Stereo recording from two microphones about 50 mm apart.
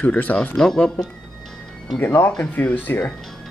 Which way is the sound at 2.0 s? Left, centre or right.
Left.